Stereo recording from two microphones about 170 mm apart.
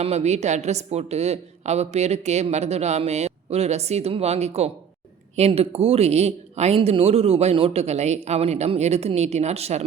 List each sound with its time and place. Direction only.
0.0 s a woman's voice: 40° right (ahead or behind)